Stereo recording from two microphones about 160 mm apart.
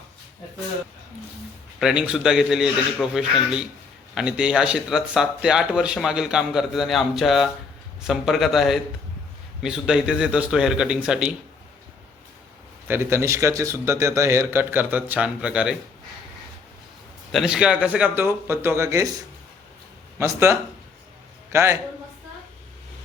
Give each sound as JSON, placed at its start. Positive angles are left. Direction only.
{"t": 1.8, "sound": "speech", "side_deg": -5}
{"t": 12.9, "sound": "speech", "side_deg": -15}
{"t": 17.3, "sound": "a man's voice", "side_deg": -5}